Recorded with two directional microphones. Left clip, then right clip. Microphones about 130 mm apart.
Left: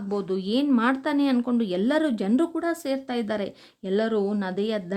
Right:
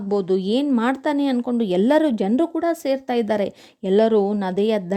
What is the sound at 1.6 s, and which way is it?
A woman's voice, 50° right (ahead or behind).